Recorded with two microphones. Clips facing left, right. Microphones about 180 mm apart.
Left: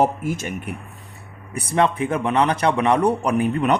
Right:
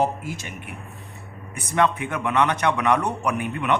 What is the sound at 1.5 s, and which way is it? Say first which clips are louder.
Speech: left 2 dB; 30° left (ahead or behind).